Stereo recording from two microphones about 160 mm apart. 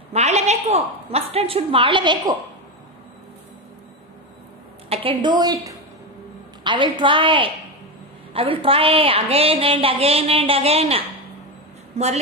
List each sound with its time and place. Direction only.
0.1 s a woman's voice: 40° right (ahead or behind)
4.8 s a sound: 35° right (ahead or behind)
5.2 s a woman's voice: 25° right (ahead or behind)